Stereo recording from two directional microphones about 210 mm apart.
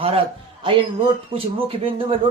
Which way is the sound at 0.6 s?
25° right (ahead or behind).